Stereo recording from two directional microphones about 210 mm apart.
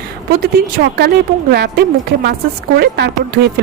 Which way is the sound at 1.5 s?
50° right (ahead or behind).